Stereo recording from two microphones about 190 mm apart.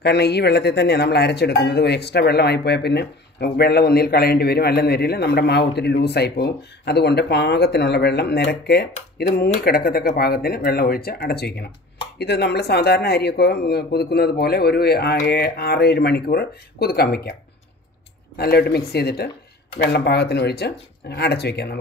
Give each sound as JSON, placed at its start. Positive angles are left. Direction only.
{"t": 0.0, "sound": "speech", "side_deg": 60}
{"t": 18.4, "sound": "speech", "side_deg": 55}